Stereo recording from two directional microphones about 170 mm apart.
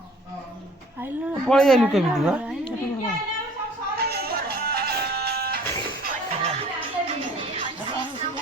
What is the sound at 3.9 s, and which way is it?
Music, 70° right (ahead or behind).